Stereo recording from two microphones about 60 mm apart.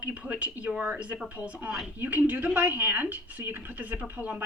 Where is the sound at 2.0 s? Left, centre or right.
Right.